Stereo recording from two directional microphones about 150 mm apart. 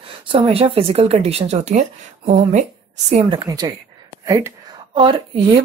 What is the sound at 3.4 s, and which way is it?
Speech, 25° right (ahead or behind).